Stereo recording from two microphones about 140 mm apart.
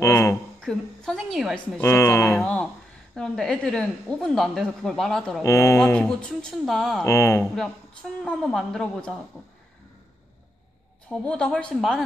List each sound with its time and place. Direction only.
0.0 s a sound: 20° left (ahead or behind)
0.6 s speech: 5° left (ahead or behind)
1.8 s speech: 20° left (ahead or behind)
2.3 s speech: 5° left (ahead or behind)
5.4 s speech: 20° left (ahead or behind)
5.8 s speech: 10° left (ahead or behind)
7.1 s speech: 20° left (ahead or behind)
8.2 s speech: 5° left (ahead or behind)
11.1 s speech: 5° left (ahead or behind)